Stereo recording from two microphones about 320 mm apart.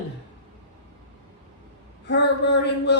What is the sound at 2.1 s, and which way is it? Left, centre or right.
Speech, left.